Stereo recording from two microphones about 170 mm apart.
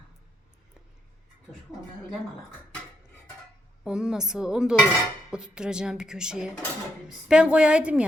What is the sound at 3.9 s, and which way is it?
A woman's voice, 5° right (ahead or behind).